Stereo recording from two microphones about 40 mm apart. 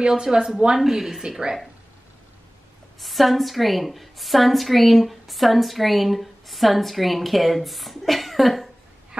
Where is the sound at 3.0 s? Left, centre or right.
Centre.